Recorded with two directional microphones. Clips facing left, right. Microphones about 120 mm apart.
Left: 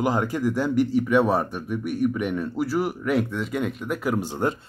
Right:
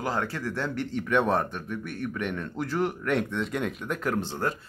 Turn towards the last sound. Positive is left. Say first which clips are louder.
# left 4 dB
turn(degrees=15)  # may be behind; listen again after turning